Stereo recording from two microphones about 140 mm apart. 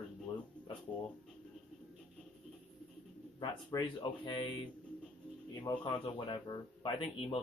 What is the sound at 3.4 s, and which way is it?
Speech, 30° left (ahead or behind).